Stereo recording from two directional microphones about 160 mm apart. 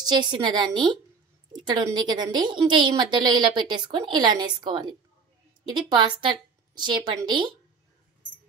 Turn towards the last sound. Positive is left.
turn(degrees=-30)  # may be behind; listen again after turning